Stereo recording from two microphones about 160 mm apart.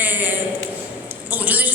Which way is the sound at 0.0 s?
10° right (ahead or behind).